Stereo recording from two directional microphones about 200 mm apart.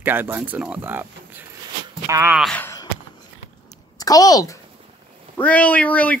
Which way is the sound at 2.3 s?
5° left (ahead or behind).